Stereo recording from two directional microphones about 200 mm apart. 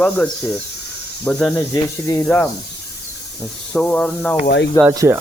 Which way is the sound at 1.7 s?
15° left (ahead or behind).